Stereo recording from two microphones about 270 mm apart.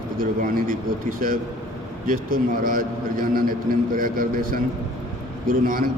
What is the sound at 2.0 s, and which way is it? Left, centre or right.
A man's voice, right.